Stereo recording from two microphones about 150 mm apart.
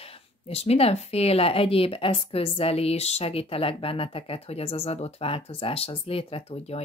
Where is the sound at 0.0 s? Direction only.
45° left (ahead or behind).